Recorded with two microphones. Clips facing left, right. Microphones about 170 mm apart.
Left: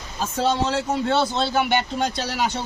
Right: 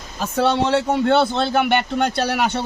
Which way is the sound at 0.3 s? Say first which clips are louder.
Right 4 dB; 65° right (ahead or behind).